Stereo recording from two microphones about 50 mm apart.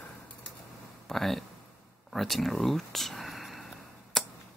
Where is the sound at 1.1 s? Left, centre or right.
Centre.